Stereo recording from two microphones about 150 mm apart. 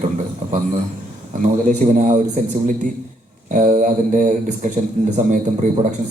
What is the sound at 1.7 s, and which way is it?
Speech, 55° right (ahead or behind).